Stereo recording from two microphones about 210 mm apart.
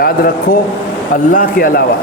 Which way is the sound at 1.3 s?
40° left (ahead or behind).